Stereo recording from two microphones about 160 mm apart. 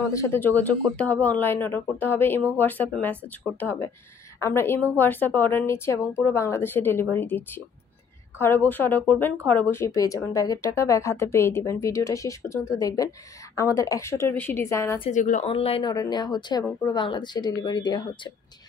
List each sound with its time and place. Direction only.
0.1 s a woman's voice: 15° left (ahead or behind)
15.0 s speech: 50° left (ahead or behind)
15.4 s speech: 35° left (ahead or behind)
15.9 s a woman's voice: 25° left (ahead or behind)